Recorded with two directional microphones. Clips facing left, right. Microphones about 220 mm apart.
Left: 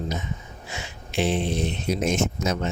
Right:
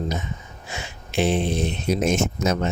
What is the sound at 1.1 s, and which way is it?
Speech, 50° right (ahead or behind).